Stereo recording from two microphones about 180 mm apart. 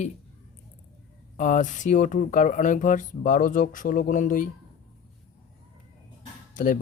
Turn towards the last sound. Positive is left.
turn(degrees=45)  # may be behind; listen again after turning